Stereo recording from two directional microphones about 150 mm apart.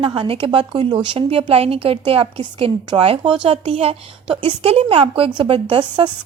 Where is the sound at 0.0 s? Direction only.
35° right (ahead or behind).